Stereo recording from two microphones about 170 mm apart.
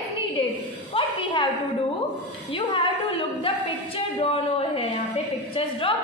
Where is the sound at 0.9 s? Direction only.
30° left (ahead or behind).